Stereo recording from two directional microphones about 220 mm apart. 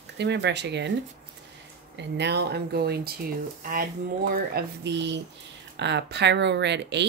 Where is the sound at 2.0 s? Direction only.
50° right (ahead or behind).